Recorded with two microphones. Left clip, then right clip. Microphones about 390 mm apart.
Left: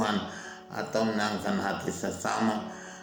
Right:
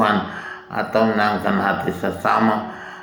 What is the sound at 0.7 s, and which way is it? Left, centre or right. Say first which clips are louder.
A man's voice: right 11 dB; left.